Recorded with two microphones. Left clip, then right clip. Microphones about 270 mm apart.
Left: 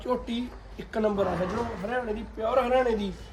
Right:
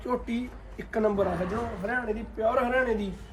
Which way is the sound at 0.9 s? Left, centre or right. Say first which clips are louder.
Right 1 dB; centre.